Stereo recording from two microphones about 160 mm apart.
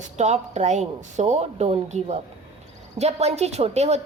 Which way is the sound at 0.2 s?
45° right (ahead or behind).